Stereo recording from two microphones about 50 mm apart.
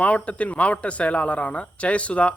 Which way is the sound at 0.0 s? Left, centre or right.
Left.